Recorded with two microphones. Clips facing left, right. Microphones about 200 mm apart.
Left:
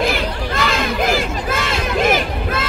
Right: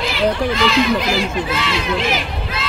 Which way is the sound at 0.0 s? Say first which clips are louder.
Right 2 dB; 50° left (ahead or behind).